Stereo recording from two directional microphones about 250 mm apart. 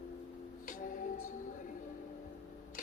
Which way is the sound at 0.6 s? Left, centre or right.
Left.